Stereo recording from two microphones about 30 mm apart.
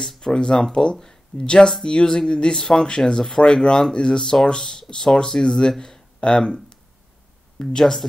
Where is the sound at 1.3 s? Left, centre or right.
Left.